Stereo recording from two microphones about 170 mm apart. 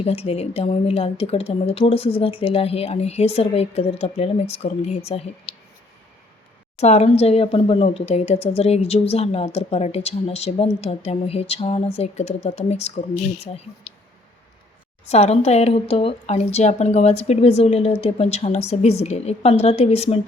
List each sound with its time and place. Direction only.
0.0 s speech: 35° left (ahead or behind)
6.7 s speech: 40° left (ahead or behind)
15.1 s speech: 40° left (ahead or behind)